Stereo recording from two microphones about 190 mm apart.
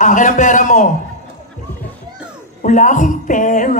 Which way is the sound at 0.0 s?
40° left (ahead or behind).